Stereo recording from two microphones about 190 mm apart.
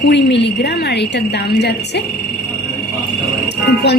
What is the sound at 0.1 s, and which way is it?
A woman's voice, 65° left (ahead or behind).